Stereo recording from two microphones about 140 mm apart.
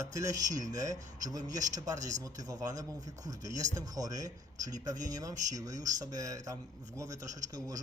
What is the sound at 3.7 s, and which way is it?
Speech, 25° right (ahead or behind).